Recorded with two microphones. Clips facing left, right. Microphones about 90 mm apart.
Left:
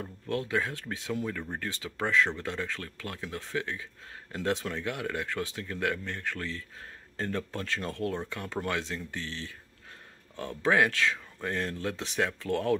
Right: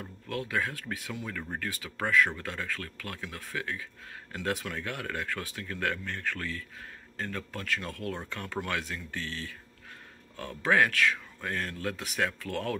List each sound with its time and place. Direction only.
0.0 s speech: 25° left (ahead or behind)